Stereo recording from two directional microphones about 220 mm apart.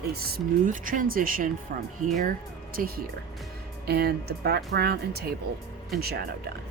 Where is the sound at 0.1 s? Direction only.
45° right (ahead or behind).